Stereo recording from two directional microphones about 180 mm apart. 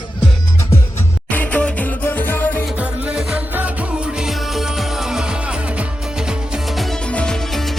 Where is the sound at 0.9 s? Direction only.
10° left (ahead or behind).